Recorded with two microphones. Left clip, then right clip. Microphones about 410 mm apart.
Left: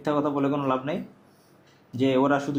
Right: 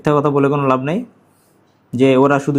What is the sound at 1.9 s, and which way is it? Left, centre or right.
Speech, right.